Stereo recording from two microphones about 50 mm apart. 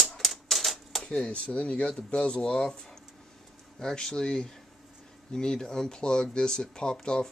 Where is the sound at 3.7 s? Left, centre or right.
Centre.